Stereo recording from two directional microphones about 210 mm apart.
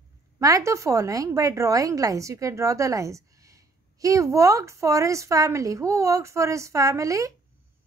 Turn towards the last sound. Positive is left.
turn(degrees=-15)  # may be behind; listen again after turning